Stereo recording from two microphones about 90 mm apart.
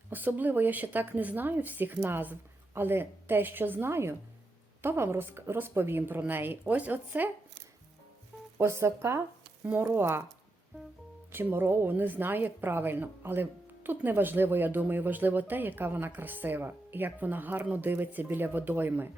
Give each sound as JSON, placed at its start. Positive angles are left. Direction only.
{"t": 0.1, "sound": "a woman's voice", "side_deg": -20}
{"t": 8.5, "sound": "a woman's voice", "side_deg": -30}
{"t": 11.3, "sound": "a woman's voice", "side_deg": -25}